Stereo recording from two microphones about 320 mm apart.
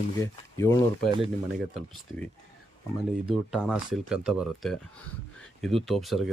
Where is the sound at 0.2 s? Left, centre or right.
Centre.